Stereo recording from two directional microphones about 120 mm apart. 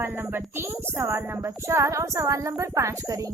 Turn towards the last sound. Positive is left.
turn(degrees=-30)  # may be behind; listen again after turning